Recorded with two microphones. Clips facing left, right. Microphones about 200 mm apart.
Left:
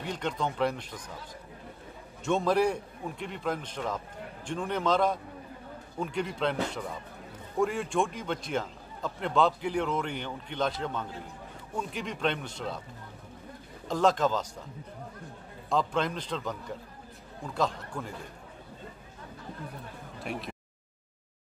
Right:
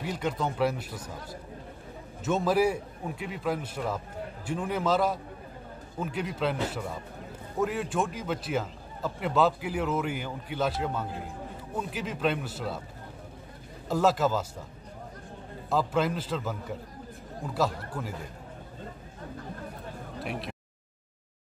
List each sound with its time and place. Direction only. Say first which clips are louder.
0.0 s speech: right 2 dB; 5° right (ahead or behind)
2.2 s a man's voice: right 1 dB; 5° right (ahead or behind)
13.8 s speech: right 1 dB; 5° right (ahead or behind)
15.7 s a man's voice: right 2 dB; 5° right (ahead or behind)
20.2 s speech: right 1 dB; centre (ahead or behind)